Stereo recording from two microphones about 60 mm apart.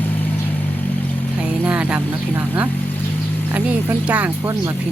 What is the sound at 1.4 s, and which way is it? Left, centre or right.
A woman's voice, centre.